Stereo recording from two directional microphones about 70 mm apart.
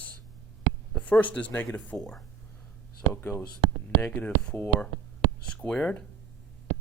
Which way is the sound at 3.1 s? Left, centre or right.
Left.